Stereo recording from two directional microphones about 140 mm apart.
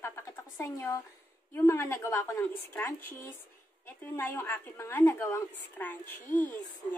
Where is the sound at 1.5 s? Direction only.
15° left (ahead or behind).